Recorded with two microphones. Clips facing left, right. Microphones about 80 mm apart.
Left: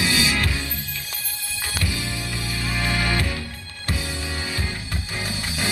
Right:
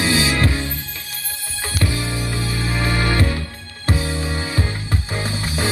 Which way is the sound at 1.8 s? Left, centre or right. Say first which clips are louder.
Right 7 dB; right.